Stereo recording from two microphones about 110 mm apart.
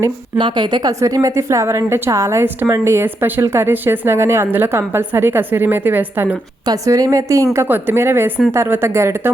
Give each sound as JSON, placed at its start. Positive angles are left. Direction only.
{"t": 0.3, "sound": "a woman's voice", "side_deg": -45}
{"t": 6.7, "sound": "a woman's voice", "side_deg": -30}